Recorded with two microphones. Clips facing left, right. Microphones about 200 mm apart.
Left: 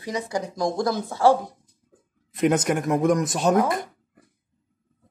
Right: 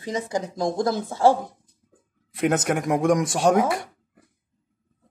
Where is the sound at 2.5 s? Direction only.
55° right (ahead or behind).